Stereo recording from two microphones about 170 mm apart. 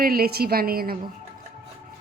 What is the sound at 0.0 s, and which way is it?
Speech, 60° right (ahead or behind).